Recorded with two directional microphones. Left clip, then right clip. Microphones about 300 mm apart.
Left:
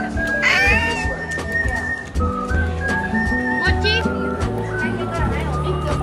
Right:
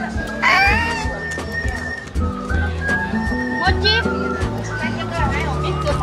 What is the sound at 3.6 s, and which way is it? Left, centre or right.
Music, right.